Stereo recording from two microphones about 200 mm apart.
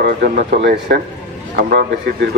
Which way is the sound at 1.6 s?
50° right (ahead or behind).